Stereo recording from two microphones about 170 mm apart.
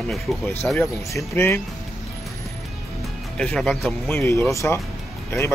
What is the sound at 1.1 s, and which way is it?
Speech, 15° left (ahead or behind).